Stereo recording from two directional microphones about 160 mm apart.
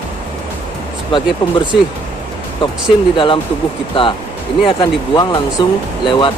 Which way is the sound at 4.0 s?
35° left (ahead or behind).